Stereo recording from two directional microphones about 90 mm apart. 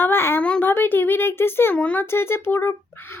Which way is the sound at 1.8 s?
15° left (ahead or behind).